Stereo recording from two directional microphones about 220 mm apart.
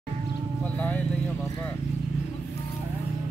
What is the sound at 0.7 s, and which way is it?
Vehicle, 5° left (ahead or behind).